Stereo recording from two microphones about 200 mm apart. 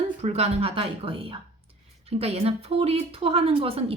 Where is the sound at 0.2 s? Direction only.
30° right (ahead or behind).